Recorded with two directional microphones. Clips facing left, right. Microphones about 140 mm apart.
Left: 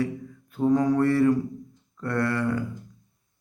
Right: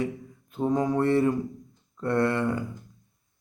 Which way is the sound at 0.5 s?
20° right (ahead or behind).